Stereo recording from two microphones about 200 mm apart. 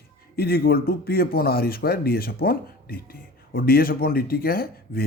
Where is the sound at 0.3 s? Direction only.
50° left (ahead or behind).